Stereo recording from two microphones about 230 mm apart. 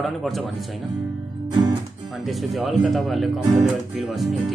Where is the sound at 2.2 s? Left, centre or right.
Centre.